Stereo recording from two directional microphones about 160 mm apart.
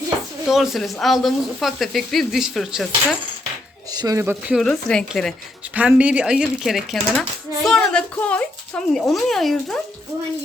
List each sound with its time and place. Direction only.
0.4 s speech: centre (ahead or behind)
3.9 s speech: 20° right (ahead or behind)
4.7 s speech: 5° left (ahead or behind)
5.7 s speech: 10° right (ahead or behind)